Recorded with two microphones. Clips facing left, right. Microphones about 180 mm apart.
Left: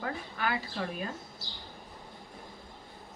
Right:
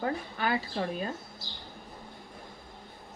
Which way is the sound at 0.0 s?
30° right (ahead or behind).